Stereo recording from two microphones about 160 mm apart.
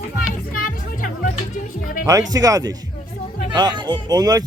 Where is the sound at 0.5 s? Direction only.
55° left (ahead or behind).